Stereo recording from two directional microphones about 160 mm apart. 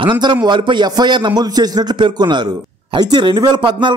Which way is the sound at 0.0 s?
30° right (ahead or behind).